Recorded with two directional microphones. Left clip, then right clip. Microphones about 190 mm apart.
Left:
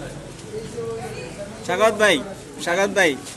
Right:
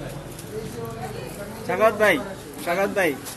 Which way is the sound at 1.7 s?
30° left (ahead or behind).